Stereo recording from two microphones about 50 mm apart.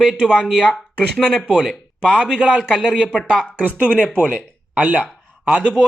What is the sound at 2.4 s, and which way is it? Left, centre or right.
Speech, centre.